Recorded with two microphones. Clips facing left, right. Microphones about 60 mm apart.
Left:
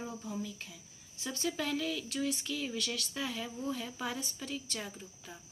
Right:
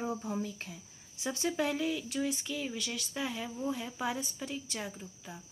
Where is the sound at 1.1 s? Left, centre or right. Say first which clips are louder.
Right 3 dB; centre.